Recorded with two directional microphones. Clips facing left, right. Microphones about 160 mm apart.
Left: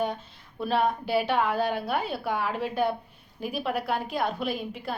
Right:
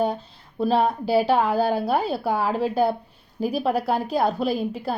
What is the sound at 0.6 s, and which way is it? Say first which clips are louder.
A woman's voice: right 5 dB; 35° right (ahead or behind).